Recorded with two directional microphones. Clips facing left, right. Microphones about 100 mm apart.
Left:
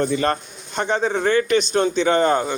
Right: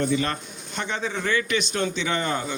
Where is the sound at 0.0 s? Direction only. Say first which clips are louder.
Left 4 dB; 40° left (ahead or behind).